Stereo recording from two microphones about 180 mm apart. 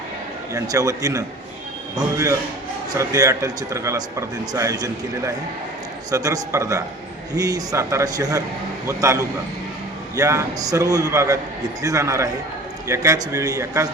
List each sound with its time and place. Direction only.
0.5 s a man's voice: 20° right (ahead or behind)